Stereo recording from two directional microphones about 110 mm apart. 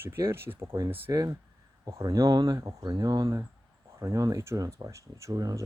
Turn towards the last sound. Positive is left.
turn(degrees=-30)  # may be behind; listen again after turning